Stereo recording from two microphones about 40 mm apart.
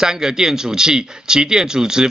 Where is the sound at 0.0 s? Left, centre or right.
Centre.